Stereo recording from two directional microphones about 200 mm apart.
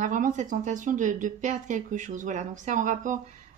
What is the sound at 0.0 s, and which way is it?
Speech, 40° right (ahead or behind).